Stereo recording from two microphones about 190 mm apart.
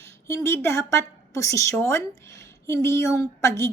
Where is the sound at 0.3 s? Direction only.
15° left (ahead or behind).